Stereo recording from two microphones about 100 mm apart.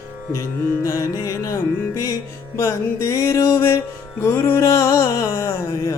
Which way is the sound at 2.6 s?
30° left (ahead or behind).